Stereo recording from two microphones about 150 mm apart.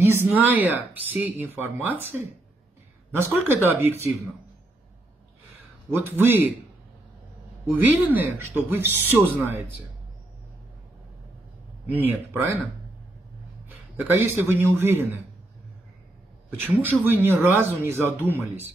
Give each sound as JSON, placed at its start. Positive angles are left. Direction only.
{"t": 0.0, "sound": "speech", "side_deg": -15}
{"t": 5.9, "sound": "speech", "side_deg": -15}
{"t": 7.7, "sound": "speech", "side_deg": -10}
{"t": 11.9, "sound": "speech", "side_deg": -15}
{"t": 13.7, "sound": "a man's voice", "side_deg": -15}
{"t": 16.4, "sound": "speech", "side_deg": -15}